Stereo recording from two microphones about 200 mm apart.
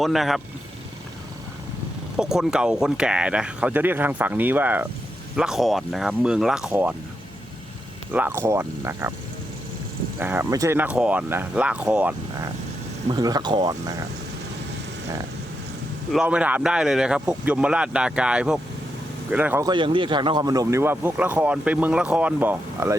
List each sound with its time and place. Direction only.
0.0 s speech: centre (ahead or behind)
2.1 s speech: 5° right (ahead or behind)
8.1 s speech: 10° right (ahead or behind)
10.2 s speech: 10° right (ahead or behind)
13.1 s speech: 20° right (ahead or behind)
16.1 s speech: 5° right (ahead or behind)
19.6 s speech: 25° right (ahead or behind)